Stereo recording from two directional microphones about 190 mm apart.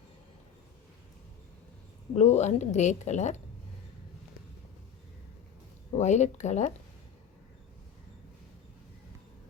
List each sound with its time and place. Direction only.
2.1 s a woman's voice: 35° left (ahead or behind)
5.9 s a woman's voice: 40° left (ahead or behind)